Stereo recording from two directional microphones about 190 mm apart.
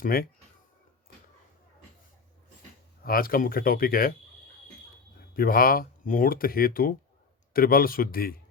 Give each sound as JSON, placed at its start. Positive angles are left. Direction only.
{"t": 0.0, "sound": "speech", "side_deg": 50}
{"t": 3.0, "sound": "speech", "side_deg": 50}
{"t": 5.3, "sound": "speech", "side_deg": 50}